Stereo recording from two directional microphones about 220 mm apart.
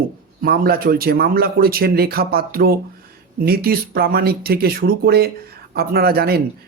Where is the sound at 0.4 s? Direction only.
45° right (ahead or behind).